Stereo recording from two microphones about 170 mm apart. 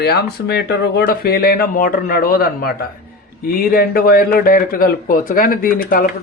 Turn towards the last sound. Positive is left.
turn(degrees=55)  # may be behind; listen again after turning